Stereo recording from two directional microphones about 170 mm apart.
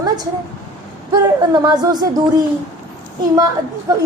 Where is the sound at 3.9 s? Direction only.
20° right (ahead or behind).